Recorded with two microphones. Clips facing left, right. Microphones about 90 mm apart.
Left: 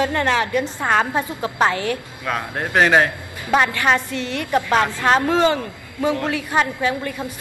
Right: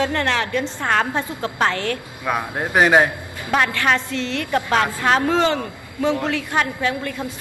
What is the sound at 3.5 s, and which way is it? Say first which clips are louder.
A woman's voice: left 2 dB; 10° left (ahead or behind).